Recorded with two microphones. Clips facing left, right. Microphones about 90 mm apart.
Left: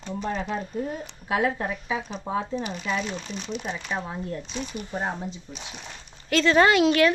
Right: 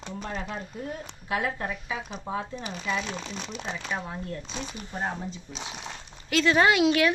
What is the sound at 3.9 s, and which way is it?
Speech, 20° left (ahead or behind).